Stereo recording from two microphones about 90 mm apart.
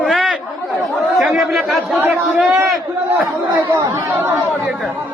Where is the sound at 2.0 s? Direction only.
20° right (ahead or behind).